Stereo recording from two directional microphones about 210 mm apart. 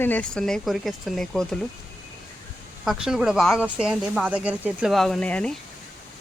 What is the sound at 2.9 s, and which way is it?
Speech, centre (ahead or behind).